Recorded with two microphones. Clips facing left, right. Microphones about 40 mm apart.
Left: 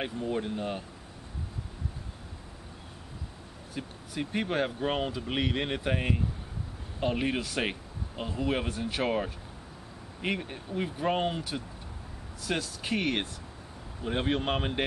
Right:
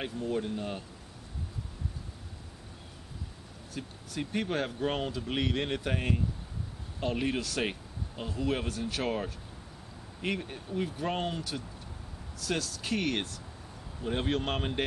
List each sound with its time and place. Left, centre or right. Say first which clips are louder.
0.0 s speech: left 1 dB; centre
3.7 s speech: left 2 dB; centre